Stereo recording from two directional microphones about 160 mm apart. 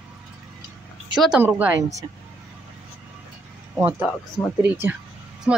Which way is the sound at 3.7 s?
10° right (ahead or behind).